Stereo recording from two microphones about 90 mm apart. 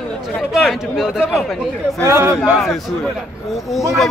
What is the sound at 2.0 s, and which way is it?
Speech, 30° right (ahead or behind).